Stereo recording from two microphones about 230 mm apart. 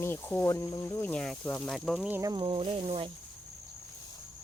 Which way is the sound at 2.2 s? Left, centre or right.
Centre.